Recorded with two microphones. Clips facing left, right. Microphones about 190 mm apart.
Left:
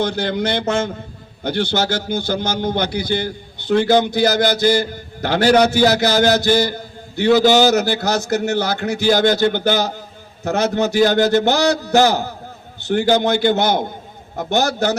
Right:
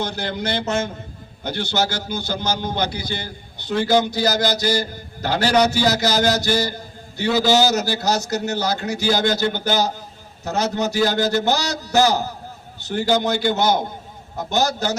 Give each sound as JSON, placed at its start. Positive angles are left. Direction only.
{"t": 0.0, "sound": "a man's voice", "side_deg": 55}